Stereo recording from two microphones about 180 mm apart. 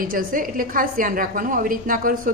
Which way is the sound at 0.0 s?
50° right (ahead or behind).